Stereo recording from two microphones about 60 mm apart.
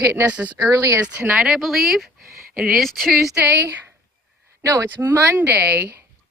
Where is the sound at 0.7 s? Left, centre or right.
Right.